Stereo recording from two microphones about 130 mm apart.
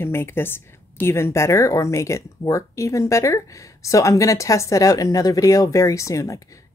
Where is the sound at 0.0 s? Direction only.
15° left (ahead or behind).